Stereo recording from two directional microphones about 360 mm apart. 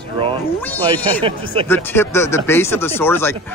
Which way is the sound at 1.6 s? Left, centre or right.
Centre.